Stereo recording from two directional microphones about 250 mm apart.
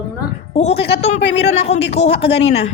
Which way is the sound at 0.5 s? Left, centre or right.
Left.